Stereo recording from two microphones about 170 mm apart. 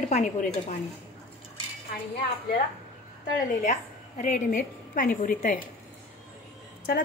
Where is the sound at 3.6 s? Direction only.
45° left (ahead or behind).